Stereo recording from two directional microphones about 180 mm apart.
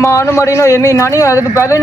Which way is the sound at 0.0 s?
15° left (ahead or behind).